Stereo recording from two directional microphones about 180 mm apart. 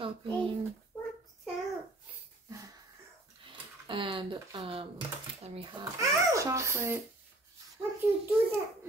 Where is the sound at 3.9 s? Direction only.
30° right (ahead or behind).